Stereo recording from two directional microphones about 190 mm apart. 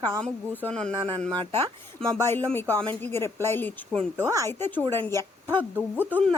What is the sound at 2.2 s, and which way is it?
Speech, 10° left (ahead or behind).